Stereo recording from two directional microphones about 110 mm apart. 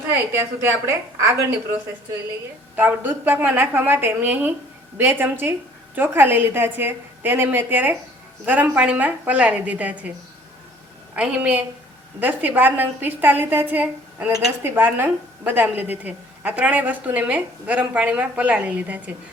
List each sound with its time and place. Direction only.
0.6 s a woman's voice: 25° right (ahead or behind)
2.7 s a woman's voice: 15° right (ahead or behind)
11.1 s a woman's voice: 10° right (ahead or behind)